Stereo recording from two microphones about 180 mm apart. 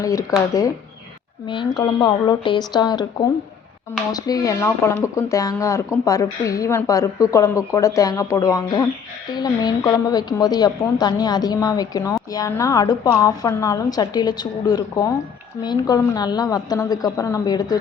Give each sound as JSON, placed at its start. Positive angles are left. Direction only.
{"t": 0.0, "sound": "a woman's voice", "side_deg": 15}